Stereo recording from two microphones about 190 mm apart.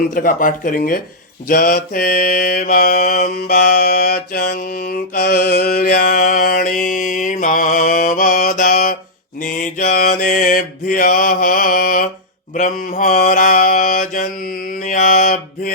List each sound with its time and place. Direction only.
0.1 s mantra: 45° left (ahead or behind)
3.5 s mantra: 40° left (ahead or behind)